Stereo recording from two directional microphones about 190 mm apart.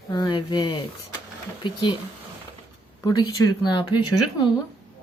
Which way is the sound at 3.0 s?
20° left (ahead or behind).